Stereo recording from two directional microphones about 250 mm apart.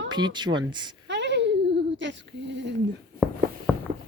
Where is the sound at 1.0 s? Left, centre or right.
Right.